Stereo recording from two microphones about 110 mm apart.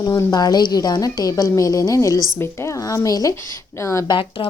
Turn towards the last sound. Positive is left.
turn(degrees=50)  # may be behind; listen again after turning